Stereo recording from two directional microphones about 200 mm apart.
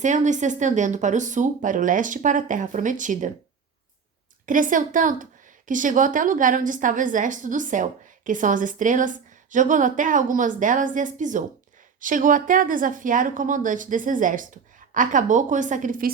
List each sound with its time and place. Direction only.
0.0 s speech: 40° right (ahead or behind)
4.4 s speech: 40° right (ahead or behind)